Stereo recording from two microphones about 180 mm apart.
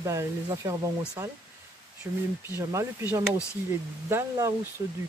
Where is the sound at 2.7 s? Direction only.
15° right (ahead or behind).